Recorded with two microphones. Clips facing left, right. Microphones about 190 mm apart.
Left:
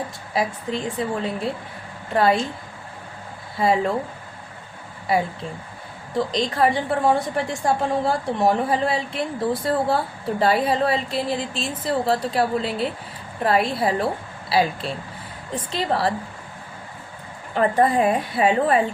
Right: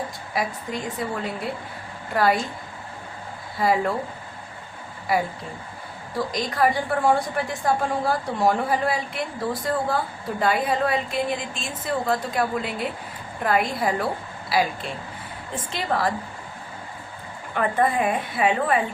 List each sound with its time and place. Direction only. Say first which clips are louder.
0.3 s a woman's voice: left 3 dB; 30° left (ahead or behind)
3.6 s a woman's voice: left 2 dB; 25° left (ahead or behind)
5.1 s a woman's voice: left 2 dB; 25° left (ahead or behind)
15.7 s a woman's voice: left 2 dB; 30° left (ahead or behind)
17.5 s a woman's voice: left 4 dB; 30° left (ahead or behind)